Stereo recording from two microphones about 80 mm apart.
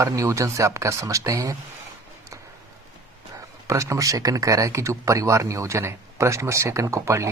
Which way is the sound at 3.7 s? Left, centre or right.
Right.